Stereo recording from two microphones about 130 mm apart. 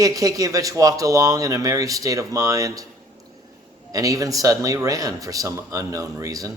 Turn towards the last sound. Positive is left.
turn(degrees=-25)  # may be behind; listen again after turning